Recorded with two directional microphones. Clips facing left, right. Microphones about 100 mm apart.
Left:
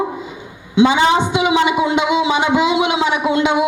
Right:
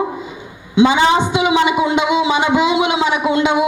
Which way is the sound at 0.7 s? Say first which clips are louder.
Right 1 dB; 20° right (ahead or behind).